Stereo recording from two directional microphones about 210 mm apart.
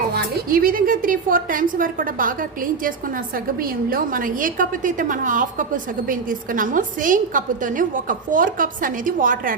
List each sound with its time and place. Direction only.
0.1 s a woman's voice: 45° right (ahead or behind)